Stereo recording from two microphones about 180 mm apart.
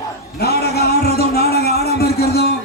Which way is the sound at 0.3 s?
60° left (ahead or behind).